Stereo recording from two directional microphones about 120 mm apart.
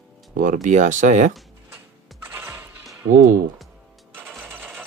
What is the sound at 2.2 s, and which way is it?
Music, 20° right (ahead or behind).